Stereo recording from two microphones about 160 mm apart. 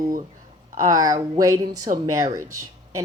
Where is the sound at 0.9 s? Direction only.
20° right (ahead or behind).